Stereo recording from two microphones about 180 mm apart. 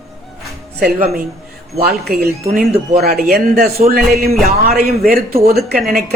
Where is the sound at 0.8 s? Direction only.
60° right (ahead or behind).